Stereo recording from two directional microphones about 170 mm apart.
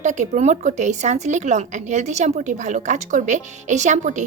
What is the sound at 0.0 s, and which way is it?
A woman's voice, 45° right (ahead or behind).